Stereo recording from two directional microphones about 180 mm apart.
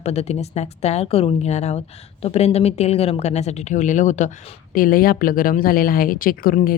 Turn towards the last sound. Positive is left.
turn(degrees=55)  # may be behind; listen again after turning